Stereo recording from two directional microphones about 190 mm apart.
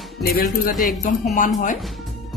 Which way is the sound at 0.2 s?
50° left (ahead or behind).